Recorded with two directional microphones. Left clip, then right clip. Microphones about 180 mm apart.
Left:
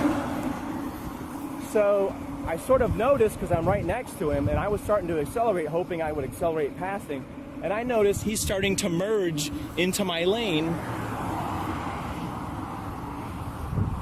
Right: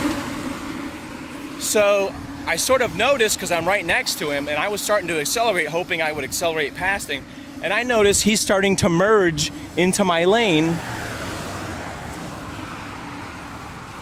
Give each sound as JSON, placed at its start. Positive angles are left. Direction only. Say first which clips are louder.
{"t": 1.7, "sound": "speech", "louder": "right 5 dB", "side_deg": -30}
{"t": 2.5, "sound": "speech", "louder": "right 4 dB", "side_deg": -15}
{"t": 7.9, "sound": "speech", "louder": "right 6 dB", "side_deg": -55}
{"t": 8.3, "sound": "speech", "louder": "right 9 dB", "side_deg": -30}